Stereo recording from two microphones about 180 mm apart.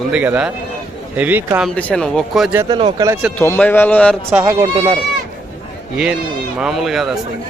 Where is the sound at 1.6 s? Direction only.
5° left (ahead or behind).